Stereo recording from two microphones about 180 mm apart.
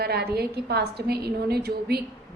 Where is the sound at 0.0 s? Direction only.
60° right (ahead or behind).